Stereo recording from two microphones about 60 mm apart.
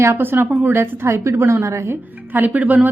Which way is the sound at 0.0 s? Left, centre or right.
Right.